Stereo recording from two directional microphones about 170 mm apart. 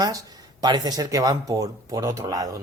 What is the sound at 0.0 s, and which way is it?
Speech, 20° right (ahead or behind).